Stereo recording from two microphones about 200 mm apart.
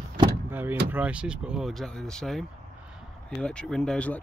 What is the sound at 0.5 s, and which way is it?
Vehicle, 10° right (ahead or behind).